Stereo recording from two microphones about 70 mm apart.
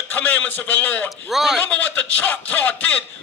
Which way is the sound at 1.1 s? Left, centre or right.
Centre.